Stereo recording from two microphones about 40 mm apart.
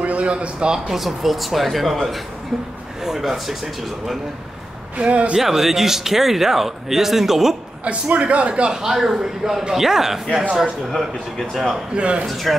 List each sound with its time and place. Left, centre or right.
0.0 s a man's voice: right
0.8 s speech: centre
4.9 s a man's voice: right
5.4 s speech: centre
7.8 s a man's voice: right
8.9 s speech: centre
10.9 s speech: centre
11.9 s a man's voice: right
12.3 s speech: centre